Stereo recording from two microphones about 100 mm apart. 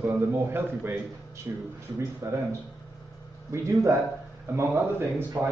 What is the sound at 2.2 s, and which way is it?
Speech, 30° right (ahead or behind).